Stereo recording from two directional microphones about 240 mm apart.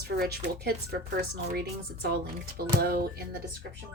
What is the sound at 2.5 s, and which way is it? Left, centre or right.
A woman's voice, right.